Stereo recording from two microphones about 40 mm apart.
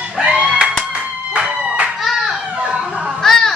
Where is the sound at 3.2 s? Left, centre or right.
Centre.